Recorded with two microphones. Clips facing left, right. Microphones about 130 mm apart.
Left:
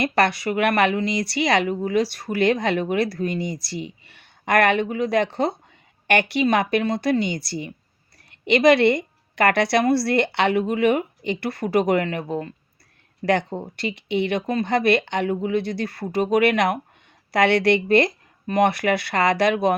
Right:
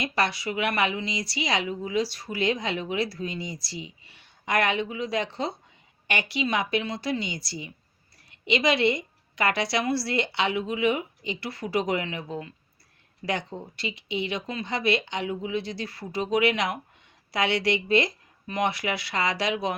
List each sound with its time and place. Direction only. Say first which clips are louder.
0.0 s a woman's voice: left 7 dB; 60° left (ahead or behind)